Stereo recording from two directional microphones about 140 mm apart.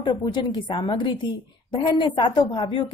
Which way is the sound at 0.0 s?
30° left (ahead or behind).